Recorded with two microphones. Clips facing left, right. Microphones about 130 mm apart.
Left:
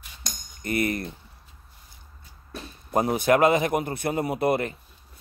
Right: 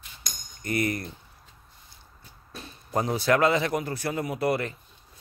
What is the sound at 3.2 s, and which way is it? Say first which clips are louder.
Speech: left 2 dB; 20° left (ahead or behind).